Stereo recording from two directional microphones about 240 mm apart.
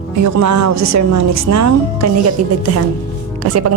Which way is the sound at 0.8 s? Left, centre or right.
Right.